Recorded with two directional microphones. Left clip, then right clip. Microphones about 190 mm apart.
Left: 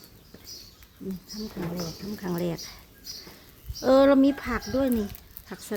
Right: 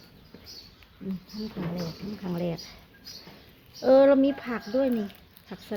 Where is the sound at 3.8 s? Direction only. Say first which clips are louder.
Even; 25° left (ahead or behind).